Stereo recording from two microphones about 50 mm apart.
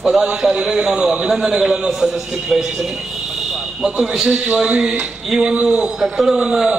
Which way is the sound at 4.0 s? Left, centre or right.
Centre.